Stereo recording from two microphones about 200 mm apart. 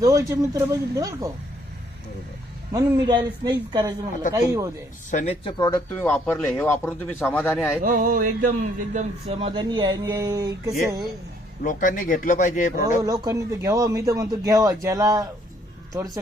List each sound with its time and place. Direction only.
0.0 s speech: 15° right (ahead or behind)
2.7 s speech: 20° right (ahead or behind)
5.1 s speech: 30° left (ahead or behind); by 7.8 s 10° left (ahead or behind)
7.8 s speech: 45° right (ahead or behind); by 10.8 s 20° right (ahead or behind)
11.6 s speech: 40° left (ahead or behind)
13.1 s speech: 15° right (ahead or behind)